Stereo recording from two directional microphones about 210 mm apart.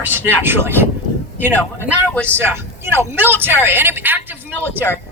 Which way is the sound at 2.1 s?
5° left (ahead or behind).